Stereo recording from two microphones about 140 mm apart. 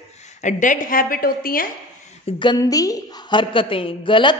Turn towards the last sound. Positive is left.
turn(degrees=35)  # may be behind; listen again after turning